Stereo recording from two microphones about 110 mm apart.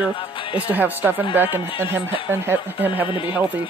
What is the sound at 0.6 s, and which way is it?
A man's voice, 15° right (ahead or behind).